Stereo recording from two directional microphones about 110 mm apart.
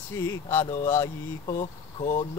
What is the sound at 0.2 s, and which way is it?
Mantra, 25° left (ahead or behind).